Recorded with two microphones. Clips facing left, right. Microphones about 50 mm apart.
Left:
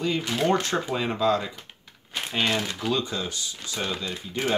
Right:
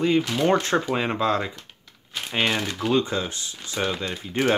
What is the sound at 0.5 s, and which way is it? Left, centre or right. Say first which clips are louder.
Speech: right 2 dB; right.